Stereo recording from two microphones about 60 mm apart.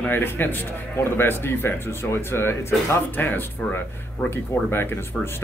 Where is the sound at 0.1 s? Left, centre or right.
Left.